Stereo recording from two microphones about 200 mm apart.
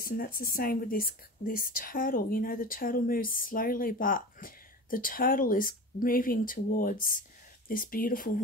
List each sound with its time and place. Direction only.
0.0 s speech: 45° left (ahead or behind)